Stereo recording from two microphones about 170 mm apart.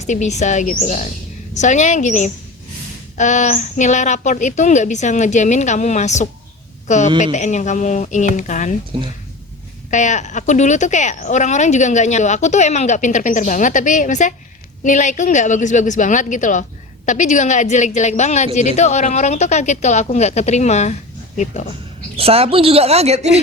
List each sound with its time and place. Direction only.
0.1 s a woman's voice: 45° left (ahead or behind)
8.9 s speech: 30° right (ahead or behind)
9.9 s a woman's voice: 45° left (ahead or behind)
22.2 s speech: 35° right (ahead or behind)